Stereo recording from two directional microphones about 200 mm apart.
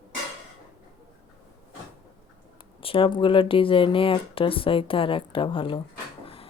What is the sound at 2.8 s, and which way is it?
Speech, 25° left (ahead or behind).